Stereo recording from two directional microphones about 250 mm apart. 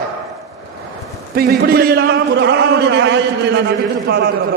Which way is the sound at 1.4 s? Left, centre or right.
Right.